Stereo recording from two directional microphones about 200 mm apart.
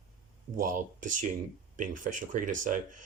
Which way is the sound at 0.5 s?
40° right (ahead or behind).